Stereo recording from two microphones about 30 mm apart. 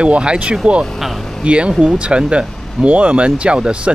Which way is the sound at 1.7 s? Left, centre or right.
Centre.